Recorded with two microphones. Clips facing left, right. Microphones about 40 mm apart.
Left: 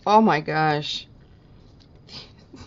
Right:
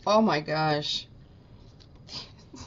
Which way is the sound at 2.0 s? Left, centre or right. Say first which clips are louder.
Even; centre.